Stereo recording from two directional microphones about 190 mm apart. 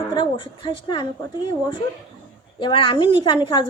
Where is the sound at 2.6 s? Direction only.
25° left (ahead or behind).